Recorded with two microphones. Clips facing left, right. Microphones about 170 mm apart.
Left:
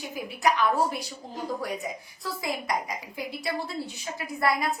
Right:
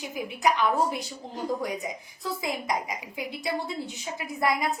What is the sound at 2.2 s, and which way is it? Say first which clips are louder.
A woman's voice: right 1 dB; 20° right (ahead or behind).